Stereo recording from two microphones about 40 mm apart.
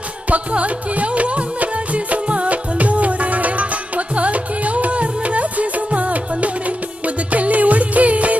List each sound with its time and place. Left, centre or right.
0.3 s music: right